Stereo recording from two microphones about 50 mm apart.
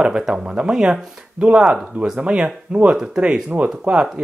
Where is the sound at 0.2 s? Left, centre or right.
Centre.